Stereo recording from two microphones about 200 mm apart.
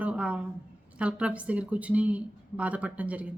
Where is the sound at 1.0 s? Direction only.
5° right (ahead or behind).